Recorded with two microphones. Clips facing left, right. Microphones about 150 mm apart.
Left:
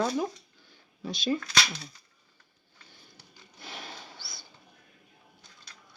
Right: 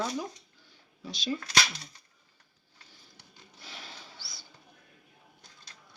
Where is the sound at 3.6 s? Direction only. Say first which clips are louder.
Left 5 dB; 55° left (ahead or behind).